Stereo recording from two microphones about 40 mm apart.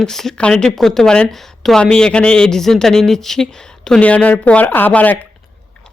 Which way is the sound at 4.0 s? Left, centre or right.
Left.